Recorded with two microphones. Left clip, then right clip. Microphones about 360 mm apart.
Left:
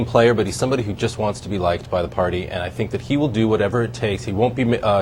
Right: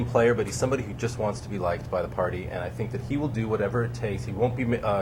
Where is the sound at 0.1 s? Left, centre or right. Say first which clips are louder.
Left 6 dB; left.